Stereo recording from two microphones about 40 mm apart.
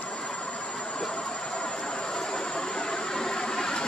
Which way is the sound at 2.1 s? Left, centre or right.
Centre.